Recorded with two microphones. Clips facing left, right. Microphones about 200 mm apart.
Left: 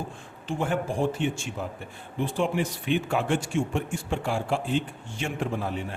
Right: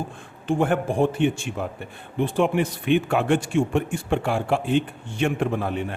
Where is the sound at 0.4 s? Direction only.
55° right (ahead or behind).